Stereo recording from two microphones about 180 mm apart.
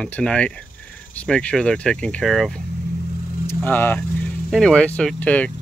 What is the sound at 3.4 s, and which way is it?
Speech, 10° left (ahead or behind).